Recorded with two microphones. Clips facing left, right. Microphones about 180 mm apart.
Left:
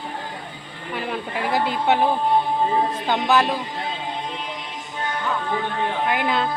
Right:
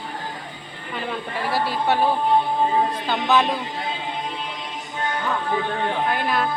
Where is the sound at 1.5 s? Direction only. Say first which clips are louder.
Left 2 dB; 20° left (ahead or behind).